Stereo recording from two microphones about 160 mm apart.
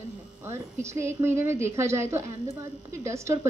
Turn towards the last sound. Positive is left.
turn(degrees=-20)  # may be behind; listen again after turning